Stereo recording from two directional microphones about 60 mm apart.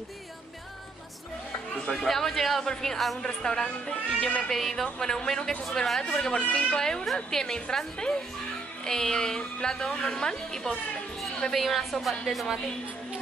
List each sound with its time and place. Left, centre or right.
1.9 s a woman's voice: centre
4.5 s a woman's voice: centre